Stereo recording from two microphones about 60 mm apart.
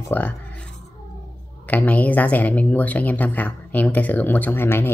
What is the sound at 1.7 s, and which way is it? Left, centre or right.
Speech, left.